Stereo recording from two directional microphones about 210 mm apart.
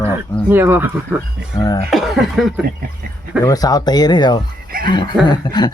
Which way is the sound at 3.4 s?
15° left (ahead or behind).